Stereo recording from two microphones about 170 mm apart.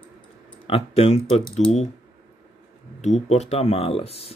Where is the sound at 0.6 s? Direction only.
30° left (ahead or behind).